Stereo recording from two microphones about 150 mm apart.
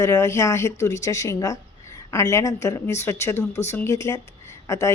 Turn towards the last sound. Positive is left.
turn(degrees=20)  # may be behind; listen again after turning